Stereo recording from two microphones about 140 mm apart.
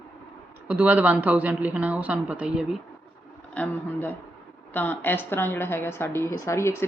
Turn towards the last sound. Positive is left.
turn(degrees=20)  # may be behind; listen again after turning